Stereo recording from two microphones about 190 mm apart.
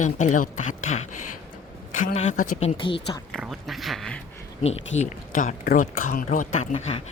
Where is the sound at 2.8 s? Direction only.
25° left (ahead or behind).